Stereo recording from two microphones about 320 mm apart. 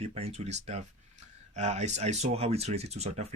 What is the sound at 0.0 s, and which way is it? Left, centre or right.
Speech, centre.